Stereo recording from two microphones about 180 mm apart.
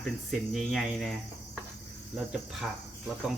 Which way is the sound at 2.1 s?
Centre (ahead or behind).